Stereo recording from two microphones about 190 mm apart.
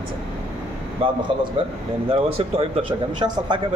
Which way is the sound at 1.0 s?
30° right (ahead or behind).